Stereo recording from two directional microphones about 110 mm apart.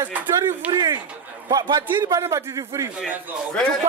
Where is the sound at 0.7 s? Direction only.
40° right (ahead or behind).